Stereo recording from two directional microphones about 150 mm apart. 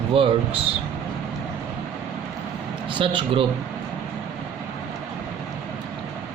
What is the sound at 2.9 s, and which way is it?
Speech, 35° right (ahead or behind).